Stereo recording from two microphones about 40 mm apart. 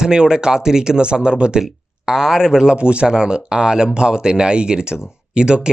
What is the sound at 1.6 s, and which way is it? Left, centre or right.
Speech, centre.